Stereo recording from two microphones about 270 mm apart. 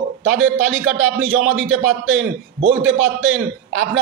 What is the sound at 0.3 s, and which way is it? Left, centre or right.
A man's voice, right.